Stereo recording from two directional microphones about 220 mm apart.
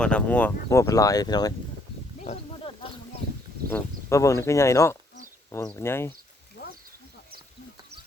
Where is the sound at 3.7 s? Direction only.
15° left (ahead or behind).